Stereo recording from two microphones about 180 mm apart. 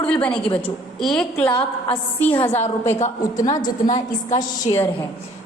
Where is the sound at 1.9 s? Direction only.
10° left (ahead or behind).